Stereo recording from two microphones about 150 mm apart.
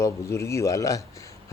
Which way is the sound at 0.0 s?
20° left (ahead or behind).